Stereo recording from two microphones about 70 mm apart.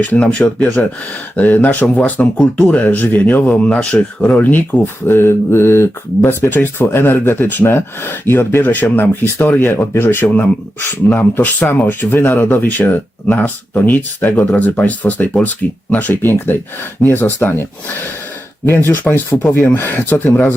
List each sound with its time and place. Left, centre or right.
0.0 s speech: centre